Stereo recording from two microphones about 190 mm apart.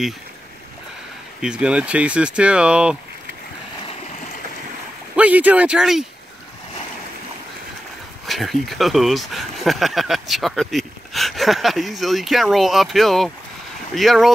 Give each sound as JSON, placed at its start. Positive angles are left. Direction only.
{"t": 1.4, "sound": "speech", "side_deg": -5}
{"t": 5.1, "sound": "speech", "side_deg": -10}
{"t": 8.3, "sound": "speech", "side_deg": 0}